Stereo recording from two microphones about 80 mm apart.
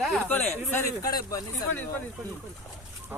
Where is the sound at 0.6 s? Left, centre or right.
Left.